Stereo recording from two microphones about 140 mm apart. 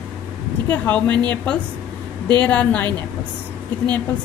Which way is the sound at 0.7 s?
10° left (ahead or behind).